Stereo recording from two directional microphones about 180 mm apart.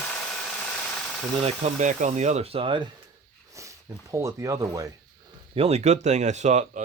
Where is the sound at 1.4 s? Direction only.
35° right (ahead or behind).